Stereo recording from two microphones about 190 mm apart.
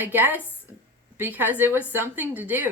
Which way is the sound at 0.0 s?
10° right (ahead or behind).